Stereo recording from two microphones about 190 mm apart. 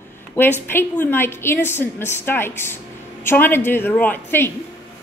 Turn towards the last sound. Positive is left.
turn(degrees=10)  # may be behind; listen again after turning